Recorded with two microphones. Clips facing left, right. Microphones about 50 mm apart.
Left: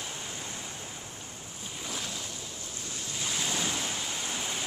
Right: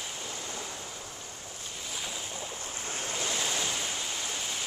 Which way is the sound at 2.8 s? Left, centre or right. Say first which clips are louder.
Right 3 dB; right.